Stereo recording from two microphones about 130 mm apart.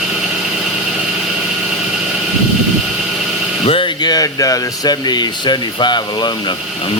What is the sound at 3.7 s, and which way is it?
Speech, 40° left (ahead or behind).